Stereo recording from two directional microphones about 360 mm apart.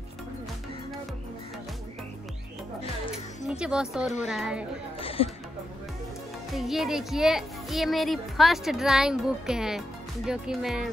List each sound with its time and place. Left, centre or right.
3.4 s a child's voice: centre
5.0 s music: centre
6.5 s a child's voice: centre